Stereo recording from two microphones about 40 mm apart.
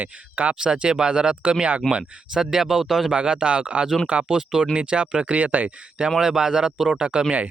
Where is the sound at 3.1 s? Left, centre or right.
Right.